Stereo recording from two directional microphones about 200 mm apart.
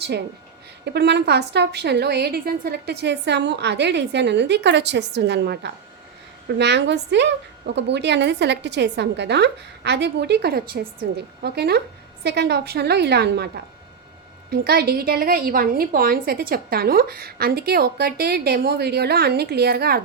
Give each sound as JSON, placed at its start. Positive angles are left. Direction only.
{"t": 0.9, "sound": "a woman's voice", "side_deg": -55}
{"t": 14.5, "sound": "a woman's voice", "side_deg": -50}